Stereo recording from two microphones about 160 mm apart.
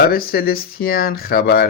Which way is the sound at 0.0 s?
70° left (ahead or behind).